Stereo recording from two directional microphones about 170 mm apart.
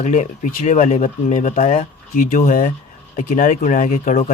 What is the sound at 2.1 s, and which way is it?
Speech, 50° left (ahead or behind).